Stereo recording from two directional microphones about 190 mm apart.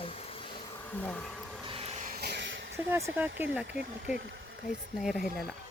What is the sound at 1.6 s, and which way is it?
Vehicle, 30° right (ahead or behind).